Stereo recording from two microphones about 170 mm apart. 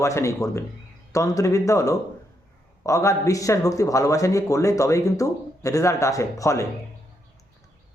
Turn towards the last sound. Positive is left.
turn(degrees=20)  # may be behind; listen again after turning